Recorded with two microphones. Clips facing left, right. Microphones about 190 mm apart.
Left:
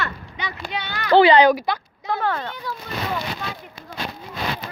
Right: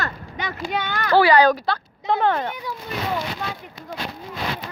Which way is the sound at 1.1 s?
25° left (ahead or behind).